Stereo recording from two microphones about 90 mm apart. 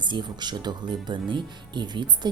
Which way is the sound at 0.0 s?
60° right (ahead or behind).